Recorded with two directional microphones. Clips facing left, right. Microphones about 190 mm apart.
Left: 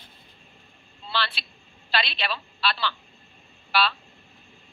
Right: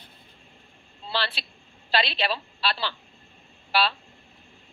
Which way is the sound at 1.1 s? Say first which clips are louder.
Even; 35° right (ahead or behind).